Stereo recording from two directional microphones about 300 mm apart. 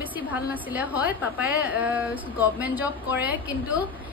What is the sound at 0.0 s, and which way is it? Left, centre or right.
A woman's voice, centre.